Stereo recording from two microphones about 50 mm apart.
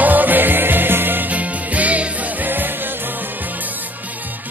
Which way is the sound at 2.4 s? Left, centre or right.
Right.